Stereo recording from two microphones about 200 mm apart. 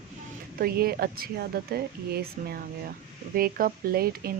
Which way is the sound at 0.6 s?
50° right (ahead or behind).